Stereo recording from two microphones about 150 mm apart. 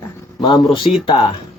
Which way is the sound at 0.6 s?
Centre (ahead or behind).